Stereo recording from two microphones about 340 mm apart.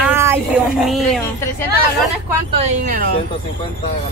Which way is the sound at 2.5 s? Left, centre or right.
Right.